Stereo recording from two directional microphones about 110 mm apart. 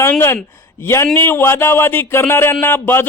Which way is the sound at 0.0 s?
20° left (ahead or behind).